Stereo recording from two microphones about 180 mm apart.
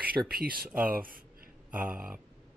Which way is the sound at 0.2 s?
20° right (ahead or behind).